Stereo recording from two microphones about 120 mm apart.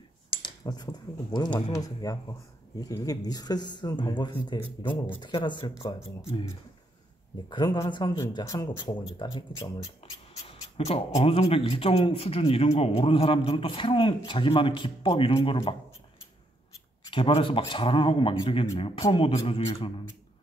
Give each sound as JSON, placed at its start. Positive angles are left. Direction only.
{"t": 0.4, "sound": "cutlery", "side_deg": 35}
{"t": 1.8, "sound": "speech", "side_deg": 30}
{"t": 7.4, "sound": "speech", "side_deg": 35}
{"t": 10.0, "sound": "speech", "side_deg": 50}
{"t": 17.1, "sound": "speech", "side_deg": 45}